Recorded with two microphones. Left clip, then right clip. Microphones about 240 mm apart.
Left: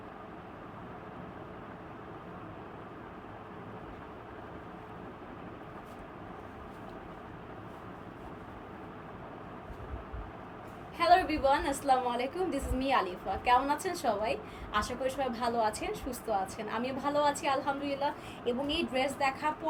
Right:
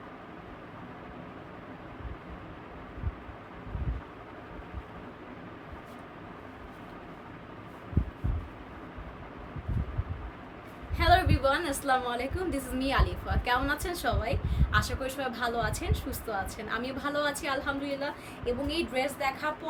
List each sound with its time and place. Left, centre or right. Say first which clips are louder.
10.9 s a woman's voice: right 1 dB; centre